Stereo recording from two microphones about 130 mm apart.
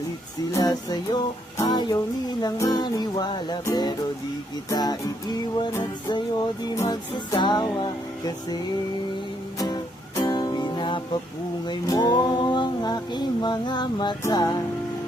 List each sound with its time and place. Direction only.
0.5 s music: 30° left (ahead or behind)
4.7 s music: 30° left (ahead or behind)